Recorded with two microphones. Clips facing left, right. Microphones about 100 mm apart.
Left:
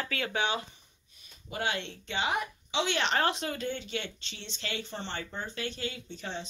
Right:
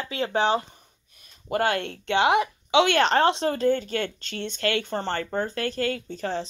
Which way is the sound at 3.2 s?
30° right (ahead or behind).